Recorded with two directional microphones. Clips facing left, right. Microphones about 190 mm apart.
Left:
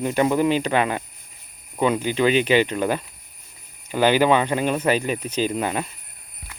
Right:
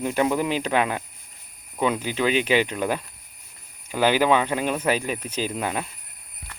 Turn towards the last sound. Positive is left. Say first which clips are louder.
# left 4 dB
turn(degrees=0)  # may be behind; listen again after turning